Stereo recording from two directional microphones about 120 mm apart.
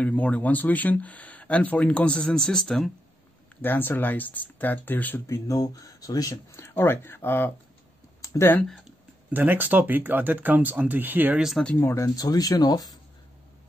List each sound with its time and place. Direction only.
0.0 s speech: 10° left (ahead or behind)
3.6 s speech: 15° left (ahead or behind)
5.2 s speech: 30° left (ahead or behind)
6.5 s speech: 20° left (ahead or behind)
8.2 s a sound: 25° left (ahead or behind)
9.3 s speech: 15° right (ahead or behind)
11.4 s speech: centre (ahead or behind)
11.7 s speech: 20° left (ahead or behind)